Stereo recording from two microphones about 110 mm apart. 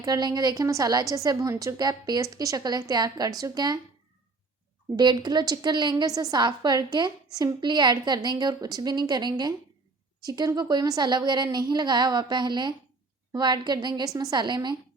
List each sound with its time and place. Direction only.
0.0 s a woman's voice: 35° right (ahead or behind)
4.9 s a woman's voice: 40° right (ahead or behind)